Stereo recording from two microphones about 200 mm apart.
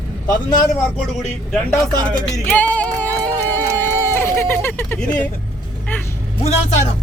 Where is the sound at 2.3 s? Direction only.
10° left (ahead or behind).